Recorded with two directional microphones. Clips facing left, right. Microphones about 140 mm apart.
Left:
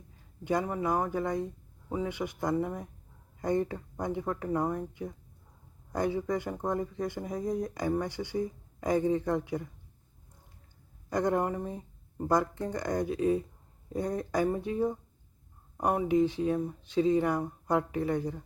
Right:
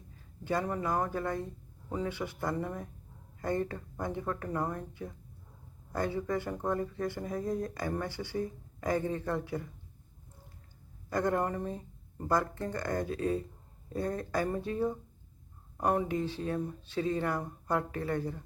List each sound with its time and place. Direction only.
0.4 s speech: 15° left (ahead or behind)
11.1 s speech: 15° left (ahead or behind)